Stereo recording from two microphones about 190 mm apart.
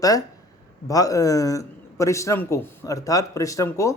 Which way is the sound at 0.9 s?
20° left (ahead or behind).